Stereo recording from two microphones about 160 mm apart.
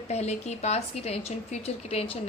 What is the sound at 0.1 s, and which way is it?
Speech, 45° left (ahead or behind).